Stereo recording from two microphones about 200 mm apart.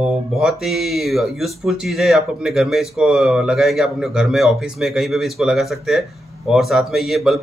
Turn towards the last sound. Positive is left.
turn(degrees=0)  # may be behind; listen again after turning